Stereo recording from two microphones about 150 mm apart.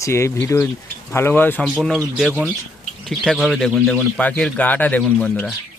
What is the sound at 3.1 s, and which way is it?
Speech, centre (ahead or behind).